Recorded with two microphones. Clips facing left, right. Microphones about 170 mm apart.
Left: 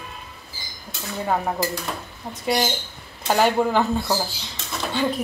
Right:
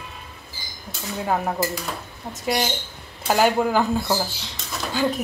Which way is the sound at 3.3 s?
5° right (ahead or behind).